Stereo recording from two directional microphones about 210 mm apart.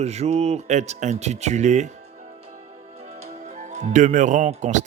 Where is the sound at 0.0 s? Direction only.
30° right (ahead or behind).